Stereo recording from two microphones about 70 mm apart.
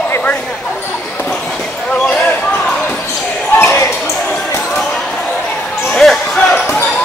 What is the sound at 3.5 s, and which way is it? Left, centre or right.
Basketball bounce, left.